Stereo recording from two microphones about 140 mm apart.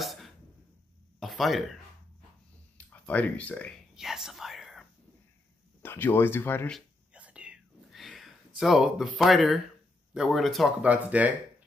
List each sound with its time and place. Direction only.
0.0 s a sound: centre (ahead or behind)
1.2 s speech: centre (ahead or behind)
2.9 s speech: 10° left (ahead or behind)
3.9 s whispering: 5° right (ahead or behind)
5.8 s speech: 15° left (ahead or behind)
7.2 s whispering: 10° right (ahead or behind)
10.1 s speech: centre (ahead or behind)